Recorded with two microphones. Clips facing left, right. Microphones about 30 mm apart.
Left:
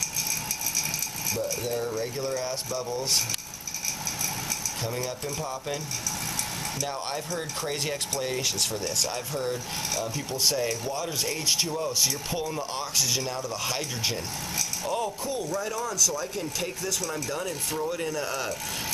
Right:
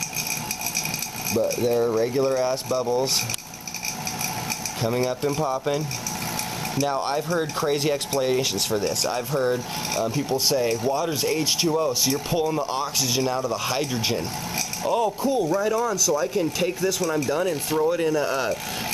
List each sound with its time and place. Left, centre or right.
1.5 s speech: centre
4.8 s speech: centre
6.8 s speech: centre